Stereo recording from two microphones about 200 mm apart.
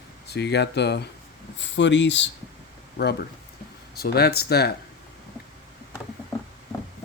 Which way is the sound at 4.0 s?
50° left (ahead or behind).